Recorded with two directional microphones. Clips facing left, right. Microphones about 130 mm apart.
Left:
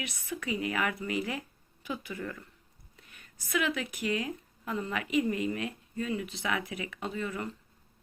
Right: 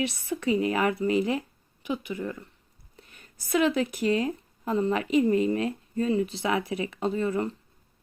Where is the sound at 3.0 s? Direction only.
35° right (ahead or behind).